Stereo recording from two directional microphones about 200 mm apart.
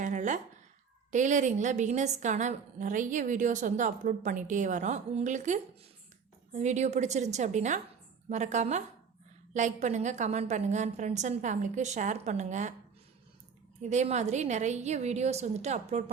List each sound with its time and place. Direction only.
0.0 s a sound: 40° right (ahead or behind)
1.1 s a woman's voice: 35° right (ahead or behind)
13.9 s a woman's voice: 35° right (ahead or behind)